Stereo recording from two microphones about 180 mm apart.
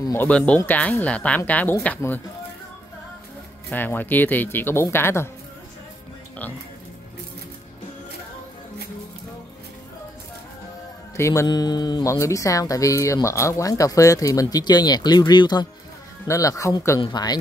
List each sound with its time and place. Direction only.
0.1 s speech: 10° left (ahead or behind)
3.7 s speech: 10° left (ahead or behind)
11.1 s speech: 15° left (ahead or behind)